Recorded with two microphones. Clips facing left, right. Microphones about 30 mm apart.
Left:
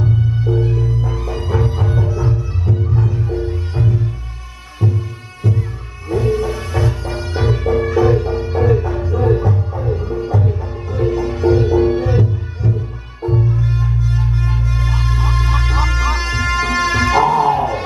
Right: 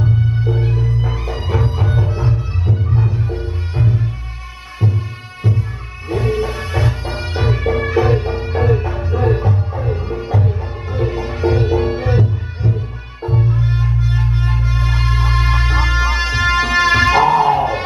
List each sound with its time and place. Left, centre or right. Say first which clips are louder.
0.6 s music: left 1 dB; right